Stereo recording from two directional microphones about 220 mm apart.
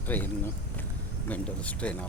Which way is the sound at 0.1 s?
10° left (ahead or behind).